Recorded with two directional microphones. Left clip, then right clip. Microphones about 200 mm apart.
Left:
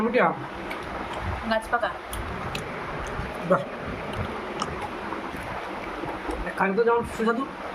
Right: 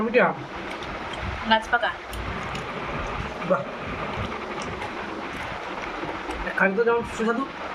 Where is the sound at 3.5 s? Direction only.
50° left (ahead or behind).